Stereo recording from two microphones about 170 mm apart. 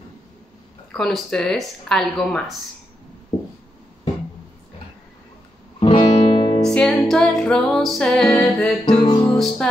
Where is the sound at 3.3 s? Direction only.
35° left (ahead or behind).